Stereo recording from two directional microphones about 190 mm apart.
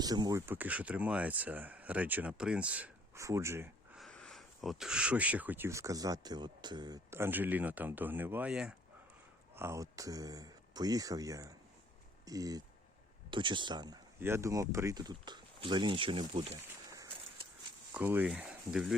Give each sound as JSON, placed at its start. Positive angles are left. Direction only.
{"t": 0.0, "sound": "speech", "side_deg": -20}
{"t": 3.9, "sound": "speech", "side_deg": 0}
{"t": 9.6, "sound": "speech", "side_deg": -15}
{"t": 17.9, "sound": "speech", "side_deg": -10}